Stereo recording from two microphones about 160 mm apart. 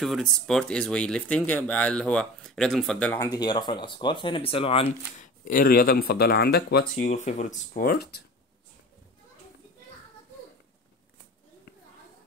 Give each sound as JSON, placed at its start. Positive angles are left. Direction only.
{"t": 0.0, "sound": "speech", "side_deg": 0}
{"t": 3.2, "sound": "speech", "side_deg": 25}
{"t": 5.1, "sound": "speech", "side_deg": 60}
{"t": 7.0, "sound": "speech", "side_deg": 50}
{"t": 7.7, "sound": "speech", "side_deg": 65}